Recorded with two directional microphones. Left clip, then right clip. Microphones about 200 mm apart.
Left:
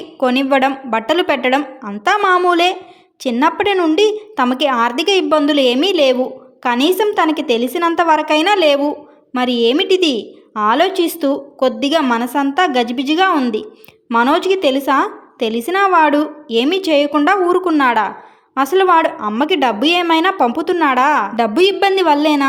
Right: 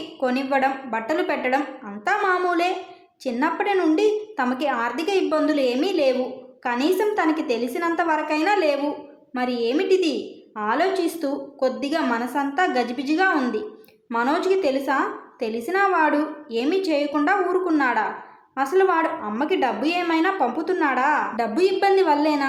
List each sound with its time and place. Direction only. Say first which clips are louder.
0.2 s a woman's voice: left 8 dB; 40° left (ahead or behind)